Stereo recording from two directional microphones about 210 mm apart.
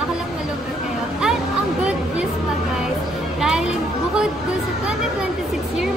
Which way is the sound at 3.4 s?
5° right (ahead or behind).